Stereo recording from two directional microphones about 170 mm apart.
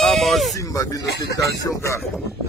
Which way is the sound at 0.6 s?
20° left (ahead or behind).